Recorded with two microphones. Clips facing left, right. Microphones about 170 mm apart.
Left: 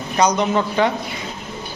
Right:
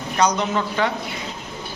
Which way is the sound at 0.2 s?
20° left (ahead or behind).